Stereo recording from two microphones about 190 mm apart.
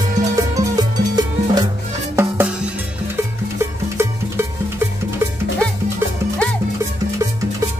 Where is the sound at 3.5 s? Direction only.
15° right (ahead or behind).